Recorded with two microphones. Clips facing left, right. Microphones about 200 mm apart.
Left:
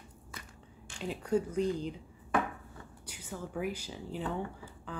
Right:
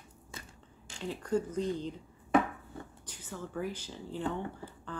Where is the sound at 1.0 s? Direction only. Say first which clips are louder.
Left 1 dB; 10° left (ahead or behind).